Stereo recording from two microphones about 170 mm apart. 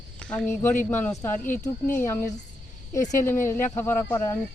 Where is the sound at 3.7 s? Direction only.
15° left (ahead or behind).